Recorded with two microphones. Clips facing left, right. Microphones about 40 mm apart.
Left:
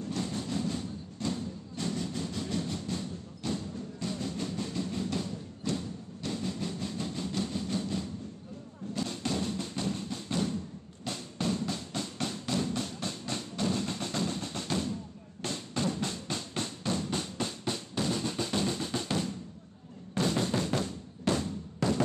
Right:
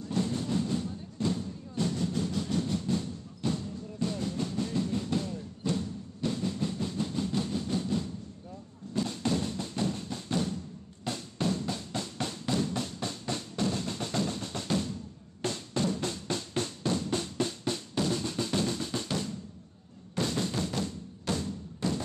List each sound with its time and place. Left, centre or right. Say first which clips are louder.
0.1 s music: right 5 dB; centre
5.8 s train: right 4 dB; centre
8.9 s thump: right 3 dB; left
9.2 s music: right 2 dB; centre
15.4 s drum: right 2 dB; centre; by 21.5 s left
21.8 s a sound: left 2 dB; left